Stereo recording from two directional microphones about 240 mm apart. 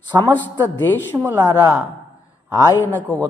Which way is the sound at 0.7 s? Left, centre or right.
Centre.